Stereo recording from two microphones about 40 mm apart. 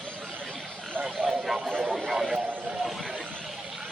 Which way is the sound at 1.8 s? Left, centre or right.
Centre.